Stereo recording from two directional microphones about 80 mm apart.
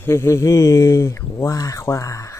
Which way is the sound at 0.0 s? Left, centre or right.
Left.